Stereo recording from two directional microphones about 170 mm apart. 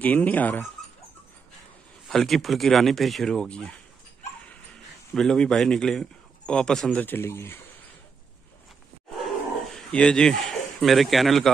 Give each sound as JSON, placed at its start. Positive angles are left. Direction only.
{"t": 0.0, "sound": "speech", "side_deg": 10}
{"t": 2.0, "sound": "a man's voice", "side_deg": 0}
{"t": 5.1, "sound": "a man's voice", "side_deg": 5}
{"t": 9.8, "sound": "a man's voice", "side_deg": 5}